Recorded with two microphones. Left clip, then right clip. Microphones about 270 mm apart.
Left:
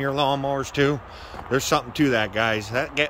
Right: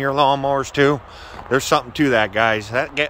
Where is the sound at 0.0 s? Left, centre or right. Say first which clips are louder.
Right 6 dB; centre.